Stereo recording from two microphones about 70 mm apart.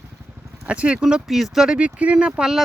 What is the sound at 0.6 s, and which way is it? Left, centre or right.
Speech, centre.